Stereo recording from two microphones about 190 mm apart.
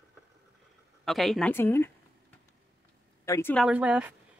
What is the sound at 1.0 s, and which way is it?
Speech, centre (ahead or behind).